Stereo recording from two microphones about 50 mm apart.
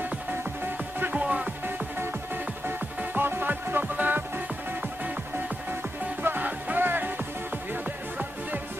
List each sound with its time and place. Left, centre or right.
1.1 s music: right
2.0 s music: right
6.2 s music: right